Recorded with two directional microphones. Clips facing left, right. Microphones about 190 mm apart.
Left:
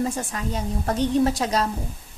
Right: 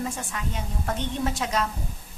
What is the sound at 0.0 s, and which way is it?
A woman's voice, 35° left (ahead or behind).